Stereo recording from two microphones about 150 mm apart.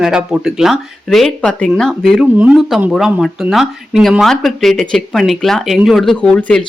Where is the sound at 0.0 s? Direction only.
5° right (ahead or behind).